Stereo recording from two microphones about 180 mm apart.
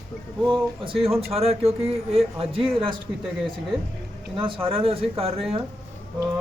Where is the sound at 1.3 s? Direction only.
35° right (ahead or behind).